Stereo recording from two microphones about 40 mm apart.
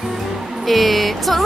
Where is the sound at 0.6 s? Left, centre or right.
Centre.